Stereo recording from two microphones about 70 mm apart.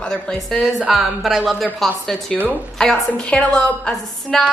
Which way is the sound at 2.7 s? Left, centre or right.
Centre.